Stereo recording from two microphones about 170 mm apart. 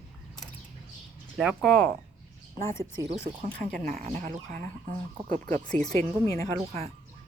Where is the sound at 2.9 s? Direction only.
35° right (ahead or behind).